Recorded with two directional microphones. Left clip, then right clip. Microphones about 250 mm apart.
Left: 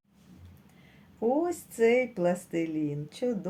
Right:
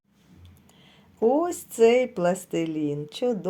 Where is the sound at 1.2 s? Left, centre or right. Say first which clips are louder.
Right 5 dB; right.